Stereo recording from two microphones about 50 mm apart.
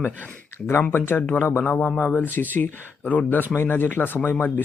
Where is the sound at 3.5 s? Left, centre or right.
Left.